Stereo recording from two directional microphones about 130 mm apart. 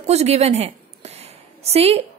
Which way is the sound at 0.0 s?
55° right (ahead or behind).